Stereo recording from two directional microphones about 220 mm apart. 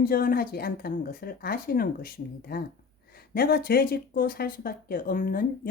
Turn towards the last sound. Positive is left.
turn(degrees=40)  # may be behind; listen again after turning